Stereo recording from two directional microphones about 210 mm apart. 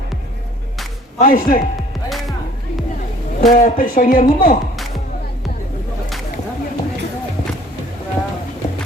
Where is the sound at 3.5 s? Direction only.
40° left (ahead or behind).